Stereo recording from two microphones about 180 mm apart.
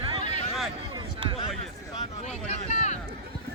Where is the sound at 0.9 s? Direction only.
30° right (ahead or behind).